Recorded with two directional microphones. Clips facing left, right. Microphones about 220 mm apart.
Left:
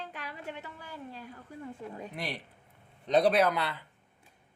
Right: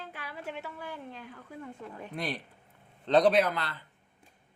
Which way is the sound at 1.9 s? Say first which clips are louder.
Left 2 dB; 20° left (ahead or behind).